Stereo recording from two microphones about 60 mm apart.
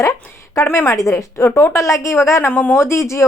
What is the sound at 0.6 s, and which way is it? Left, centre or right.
A woman's voice, left.